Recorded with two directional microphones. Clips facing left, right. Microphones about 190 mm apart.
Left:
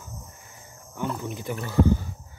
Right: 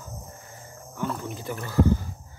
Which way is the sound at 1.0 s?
15° left (ahead or behind).